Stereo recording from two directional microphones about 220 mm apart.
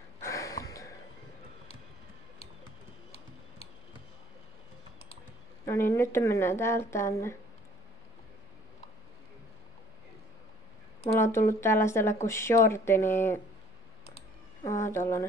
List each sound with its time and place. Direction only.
0.2 s a sound: 15° left (ahead or behind)
5.7 s speech: 10° left (ahead or behind)
11.1 s speech: 10° left (ahead or behind)
14.6 s speech: 15° left (ahead or behind)